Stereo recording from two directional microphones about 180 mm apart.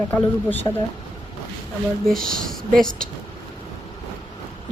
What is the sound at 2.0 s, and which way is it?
Speech, centre (ahead or behind).